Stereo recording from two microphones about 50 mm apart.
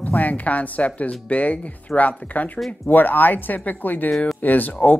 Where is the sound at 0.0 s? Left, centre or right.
Left.